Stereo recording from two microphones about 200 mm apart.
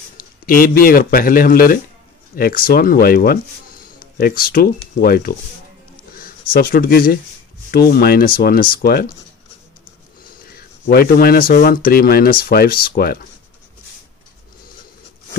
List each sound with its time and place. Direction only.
0.2 s speech: 45° left (ahead or behind)
6.5 s speech: 45° left (ahead or behind)
10.5 s speech: 50° left (ahead or behind)